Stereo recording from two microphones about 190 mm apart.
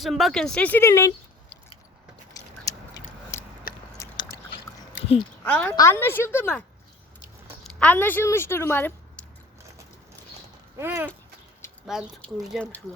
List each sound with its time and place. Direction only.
0.0 s speech: centre (ahead or behind)
2.3 s a sound: 20° left (ahead or behind)
3.9 s biting: 15° left (ahead or behind)
5.5 s a woman's voice: 5° left (ahead or behind)
10.8 s speech: 10° right (ahead or behind); by 12.8 s 5° left (ahead or behind)